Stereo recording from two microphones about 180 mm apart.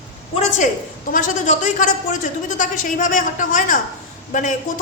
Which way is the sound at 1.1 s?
45° left (ahead or behind).